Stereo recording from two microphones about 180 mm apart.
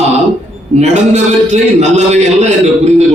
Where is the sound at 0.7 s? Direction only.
40° right (ahead or behind).